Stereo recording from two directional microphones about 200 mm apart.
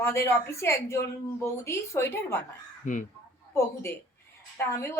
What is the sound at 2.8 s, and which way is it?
Speech, 40° left (ahead or behind).